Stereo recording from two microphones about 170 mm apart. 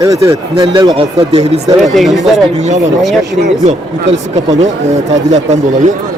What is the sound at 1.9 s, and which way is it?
Speech, centre (ahead or behind).